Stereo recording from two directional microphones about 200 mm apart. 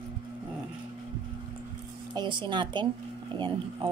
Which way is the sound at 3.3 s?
25° right (ahead or behind).